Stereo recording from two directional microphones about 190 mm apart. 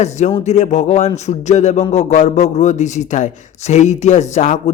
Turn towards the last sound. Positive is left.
turn(degrees=40)  # may be behind; listen again after turning